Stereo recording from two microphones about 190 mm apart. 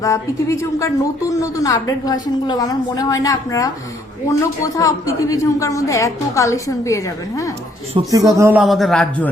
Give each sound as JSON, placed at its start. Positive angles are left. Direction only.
{"t": 0.0, "sound": "a woman's voice", "side_deg": 15}
{"t": 7.9, "sound": "speech", "side_deg": -20}
{"t": 8.6, "sound": "a man's voice", "side_deg": 0}